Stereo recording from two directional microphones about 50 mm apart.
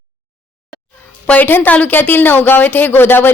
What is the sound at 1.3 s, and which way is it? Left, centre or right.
Speech, left.